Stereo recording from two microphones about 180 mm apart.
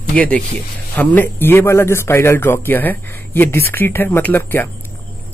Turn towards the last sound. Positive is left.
turn(degrees=10)  # may be behind; listen again after turning